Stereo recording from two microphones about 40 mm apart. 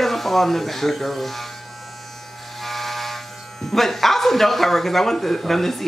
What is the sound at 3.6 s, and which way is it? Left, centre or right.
Speech, centre.